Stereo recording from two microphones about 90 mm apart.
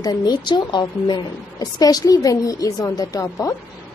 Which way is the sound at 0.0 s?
50° left (ahead or behind).